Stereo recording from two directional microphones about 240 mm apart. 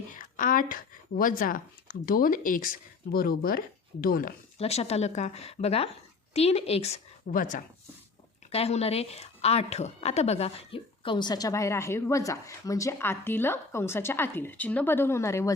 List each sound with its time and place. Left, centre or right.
0.2 s a woman's voice: left; by 15.5 s centre